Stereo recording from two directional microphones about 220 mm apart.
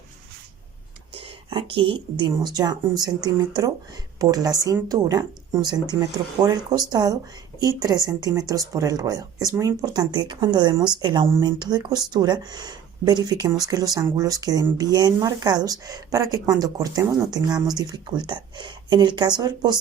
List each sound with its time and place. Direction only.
1.5 s a woman's voice: 25° right (ahead or behind)